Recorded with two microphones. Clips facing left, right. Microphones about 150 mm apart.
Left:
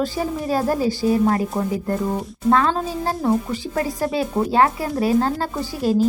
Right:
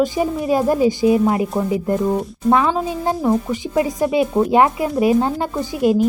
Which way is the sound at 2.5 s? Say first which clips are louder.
Right 2 dB; 10° right (ahead or behind).